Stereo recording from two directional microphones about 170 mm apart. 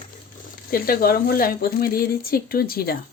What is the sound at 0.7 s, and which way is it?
Speech, 60° left (ahead or behind).